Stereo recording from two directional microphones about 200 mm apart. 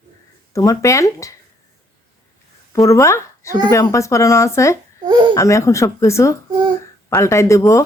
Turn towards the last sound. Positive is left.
turn(degrees=15)  # may be behind; listen again after turning